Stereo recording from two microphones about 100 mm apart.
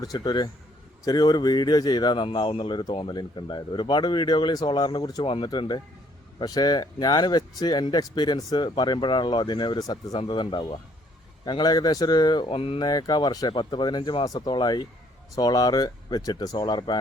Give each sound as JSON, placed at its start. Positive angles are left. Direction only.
{"t": 0.0, "sound": "speech", "side_deg": 40}
{"t": 2.2, "sound": "speech", "side_deg": 60}
{"t": 10.2, "sound": "speech", "side_deg": 55}
{"t": 11.4, "sound": "speech", "side_deg": 45}
{"t": 12.5, "sound": "mantra", "side_deg": 75}
{"t": 12.8, "sound": "speech", "side_deg": 40}